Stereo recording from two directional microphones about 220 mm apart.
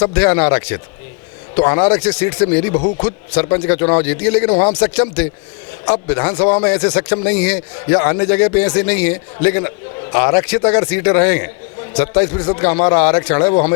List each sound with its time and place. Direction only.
0.0 s a man's voice: 10° left (ahead or behind)
1.5 s speech: 25° left (ahead or behind)
1.8 s a man's voice: 10° left (ahead or behind)
6.4 s speech: 25° left (ahead or behind)
6.7 s a man's voice: 10° left (ahead or behind)
12.4 s a man's voice: 20° left (ahead or behind)
13.5 s speech: 30° left (ahead or behind)